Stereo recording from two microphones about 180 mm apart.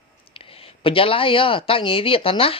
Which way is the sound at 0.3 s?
30° left (ahead or behind).